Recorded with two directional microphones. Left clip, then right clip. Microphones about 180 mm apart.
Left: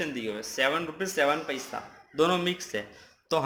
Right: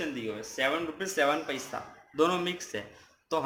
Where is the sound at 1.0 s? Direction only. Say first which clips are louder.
Left 1 dB; 15° left (ahead or behind).